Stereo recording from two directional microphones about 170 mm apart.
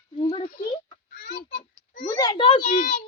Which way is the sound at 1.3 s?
70° left (ahead or behind).